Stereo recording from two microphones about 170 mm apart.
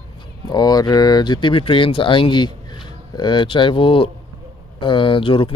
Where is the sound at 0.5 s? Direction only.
25° left (ahead or behind).